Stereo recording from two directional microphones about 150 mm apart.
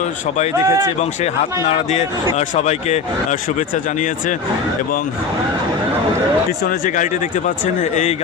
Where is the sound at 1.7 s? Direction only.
50° left (ahead or behind).